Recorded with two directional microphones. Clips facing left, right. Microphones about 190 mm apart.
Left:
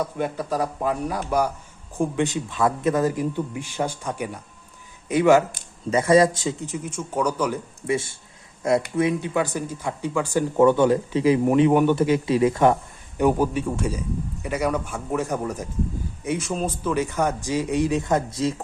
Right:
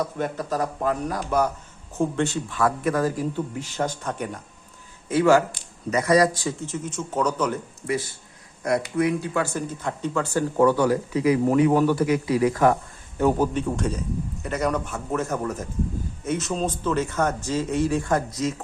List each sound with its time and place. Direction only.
0.2 s speech: 10° left (ahead or behind)
7.9 s speech: 25° left (ahead or behind)
13.1 s speech: 10° left (ahead or behind); by 18.5 s 30° left (ahead or behind)